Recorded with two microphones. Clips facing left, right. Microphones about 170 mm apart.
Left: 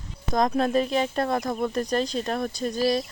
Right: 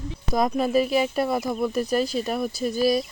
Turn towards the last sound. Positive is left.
turn(degrees=-5)  # may be behind; listen again after turning